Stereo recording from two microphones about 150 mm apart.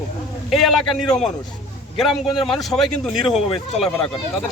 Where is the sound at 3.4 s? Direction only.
45° left (ahead or behind).